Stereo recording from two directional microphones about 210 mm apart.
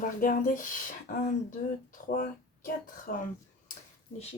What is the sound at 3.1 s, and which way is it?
Speech, 40° left (ahead or behind).